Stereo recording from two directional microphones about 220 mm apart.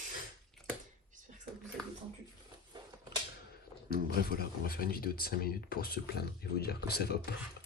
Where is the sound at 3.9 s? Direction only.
45° left (ahead or behind).